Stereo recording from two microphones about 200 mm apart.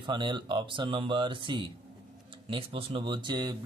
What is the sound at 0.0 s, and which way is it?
Speech, 25° right (ahead or behind).